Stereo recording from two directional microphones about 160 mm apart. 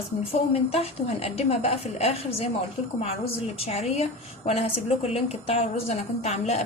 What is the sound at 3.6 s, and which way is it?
Speech, 40° left (ahead or behind).